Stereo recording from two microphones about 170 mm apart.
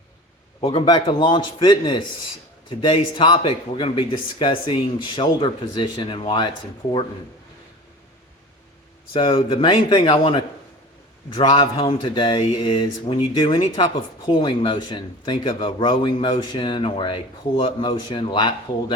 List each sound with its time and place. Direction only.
0.6 s a man's voice: 30° left (ahead or behind)
9.1 s a man's voice: 30° left (ahead or behind)